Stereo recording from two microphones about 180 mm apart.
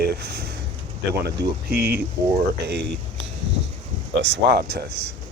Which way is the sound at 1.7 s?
60° right (ahead or behind).